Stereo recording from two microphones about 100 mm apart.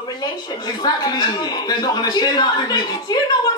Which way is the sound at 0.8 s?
45° left (ahead or behind).